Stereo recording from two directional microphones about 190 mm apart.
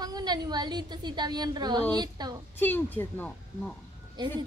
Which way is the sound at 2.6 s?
10° left (ahead or behind).